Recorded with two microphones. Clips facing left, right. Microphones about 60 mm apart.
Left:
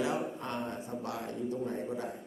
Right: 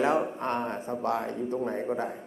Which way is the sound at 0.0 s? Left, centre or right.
Right.